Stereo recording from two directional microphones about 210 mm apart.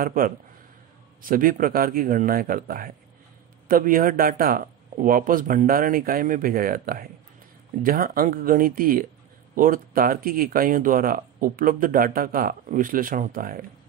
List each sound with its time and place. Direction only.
0.0 s speech: 40° right (ahead or behind)